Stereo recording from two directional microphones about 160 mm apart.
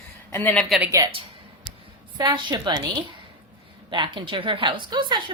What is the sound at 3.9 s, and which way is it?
A woman's voice, 30° right (ahead or behind).